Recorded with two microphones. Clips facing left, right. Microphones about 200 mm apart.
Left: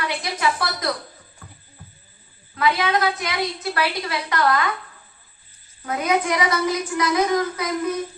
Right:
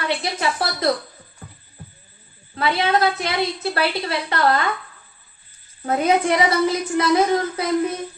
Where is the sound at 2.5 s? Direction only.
30° right (ahead or behind).